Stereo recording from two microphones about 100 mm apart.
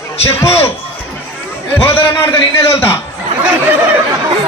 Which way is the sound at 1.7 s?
20° left (ahead or behind).